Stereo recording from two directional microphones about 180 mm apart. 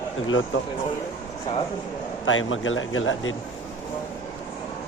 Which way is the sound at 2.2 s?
90° left.